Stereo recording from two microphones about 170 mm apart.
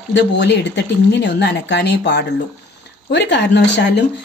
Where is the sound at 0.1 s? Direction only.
90° left.